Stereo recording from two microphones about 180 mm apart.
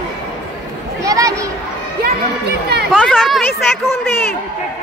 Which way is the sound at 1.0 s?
20° right (ahead or behind).